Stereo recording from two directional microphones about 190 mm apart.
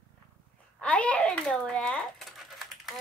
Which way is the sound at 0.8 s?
5° left (ahead or behind).